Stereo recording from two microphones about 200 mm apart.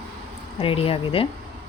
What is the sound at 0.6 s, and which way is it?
Speech, 30° left (ahead or behind).